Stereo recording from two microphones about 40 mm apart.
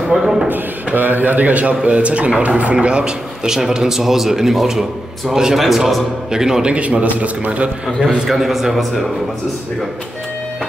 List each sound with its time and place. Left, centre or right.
0.1 s speech: centre
0.5 s a man's voice: right; by 6.6 s centre
6.6 s a man's voice: right
8.3 s a man's voice: centre